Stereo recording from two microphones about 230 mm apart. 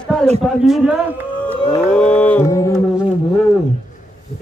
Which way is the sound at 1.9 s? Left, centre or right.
Centre.